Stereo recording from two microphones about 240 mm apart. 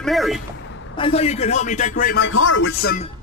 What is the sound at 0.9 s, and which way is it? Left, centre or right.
A man's voice, left.